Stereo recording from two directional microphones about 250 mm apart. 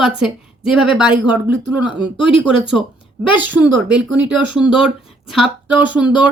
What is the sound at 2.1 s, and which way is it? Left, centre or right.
Speech, centre.